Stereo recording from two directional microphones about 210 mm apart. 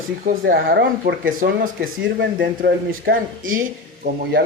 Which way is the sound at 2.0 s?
55° right (ahead or behind).